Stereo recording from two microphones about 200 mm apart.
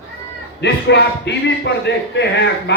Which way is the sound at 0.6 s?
60° left (ahead or behind).